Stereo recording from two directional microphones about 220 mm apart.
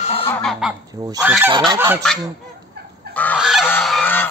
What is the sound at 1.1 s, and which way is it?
Speech, 15° right (ahead or behind).